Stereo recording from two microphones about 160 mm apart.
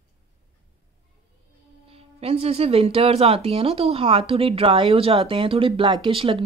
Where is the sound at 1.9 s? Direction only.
40° right (ahead or behind).